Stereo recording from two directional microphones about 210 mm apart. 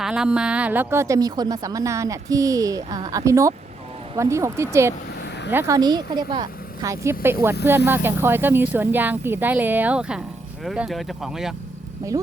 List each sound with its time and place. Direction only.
0.0 s a woman's voice: 5° right (ahead or behind)
12.1 s speech: 15° right (ahead or behind)